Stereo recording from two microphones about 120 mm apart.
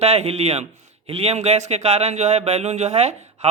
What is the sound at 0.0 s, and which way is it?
A man's voice, 65° right (ahead or behind).